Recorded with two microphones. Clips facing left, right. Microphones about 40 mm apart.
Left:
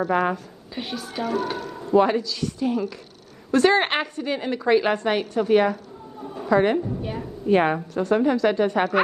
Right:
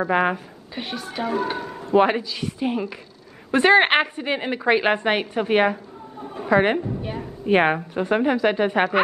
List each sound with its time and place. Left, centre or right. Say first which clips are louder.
0.0 s a woman's voice: right 1 dB; right
0.7 s a woman's voice: right 1 dB; centre
1.9 s a woman's voice: right 1 dB; right
6.2 s a sound: right 1 dB; right
6.8 s a sound: even; centre
7.4 s a woman's voice: right 1 dB; right